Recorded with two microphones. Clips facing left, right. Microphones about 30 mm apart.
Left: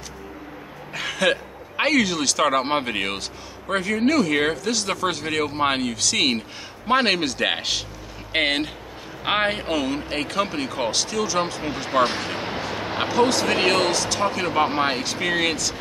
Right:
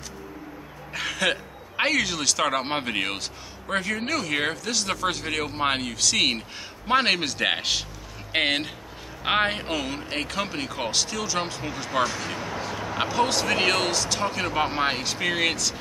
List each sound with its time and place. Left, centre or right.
0.9 s a man's voice: centre
12.0 s speech: left
12.7 s a sound: left
13.6 s speech: centre
13.9 s a man's voice: centre